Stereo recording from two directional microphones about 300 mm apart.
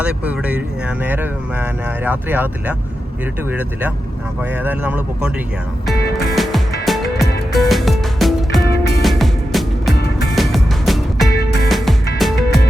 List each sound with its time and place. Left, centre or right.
0.0 s speech: centre
5.8 s music: centre
8.7 s music: left
9.0 s music: centre